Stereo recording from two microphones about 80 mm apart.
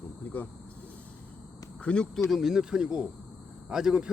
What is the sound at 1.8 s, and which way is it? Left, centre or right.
Speech, centre.